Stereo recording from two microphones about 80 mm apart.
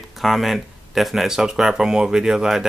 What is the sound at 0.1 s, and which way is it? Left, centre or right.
Speech, centre.